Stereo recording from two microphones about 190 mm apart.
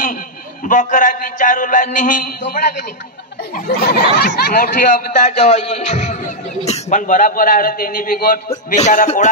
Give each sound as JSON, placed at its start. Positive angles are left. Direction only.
{"t": 0.7, "sound": "speech", "side_deg": 45}